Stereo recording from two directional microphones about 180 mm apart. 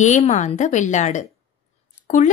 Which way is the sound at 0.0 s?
40° left (ahead or behind).